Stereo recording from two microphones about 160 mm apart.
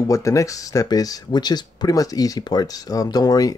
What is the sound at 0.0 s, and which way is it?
Speech, 20° left (ahead or behind).